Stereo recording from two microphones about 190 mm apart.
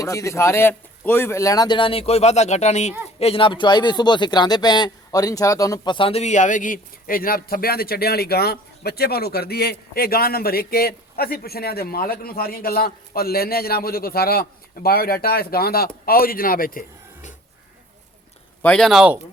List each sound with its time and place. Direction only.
0.0 s a man's voice: 15° left (ahead or behind); by 16.8 s 50° left (ahead or behind)
18.6 s speech: 5° left (ahead or behind)